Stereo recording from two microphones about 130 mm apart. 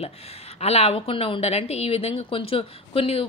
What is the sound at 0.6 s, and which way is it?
A woman's voice, 50° left (ahead or behind).